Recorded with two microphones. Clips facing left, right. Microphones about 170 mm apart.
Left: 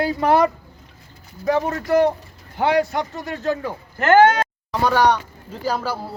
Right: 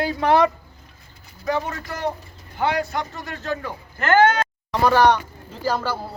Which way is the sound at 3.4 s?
35° left (ahead or behind).